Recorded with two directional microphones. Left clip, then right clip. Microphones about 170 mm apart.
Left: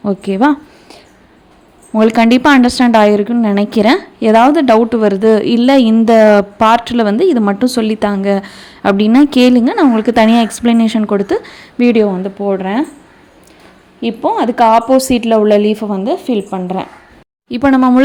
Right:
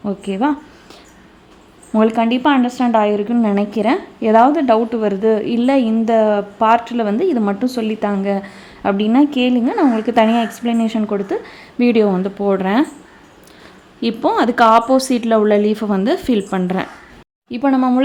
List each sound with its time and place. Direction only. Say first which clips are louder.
0.0 s speech: left 7 dB; 20° left (ahead or behind)
2.0 s a woman's voice: left 4 dB; 20° left (ahead or behind)
2.2 s a woman's voice: left 6 dB; 30° left (ahead or behind); by 12.1 s 15° left (ahead or behind)
12.1 s a woman's voice: left 1 dB; centre (ahead or behind)
14.0 s a woman's voice: left 2 dB; 5° left (ahead or behind)
17.5 s a woman's voice: left 5 dB; 25° left (ahead or behind)